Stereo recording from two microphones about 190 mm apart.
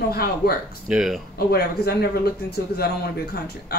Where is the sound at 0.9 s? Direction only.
Centre (ahead or behind).